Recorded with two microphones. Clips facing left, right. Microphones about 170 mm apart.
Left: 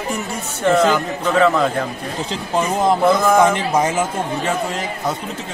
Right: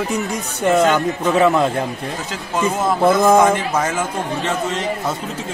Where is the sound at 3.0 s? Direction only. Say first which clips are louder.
Right 4 dB; 25° right (ahead or behind).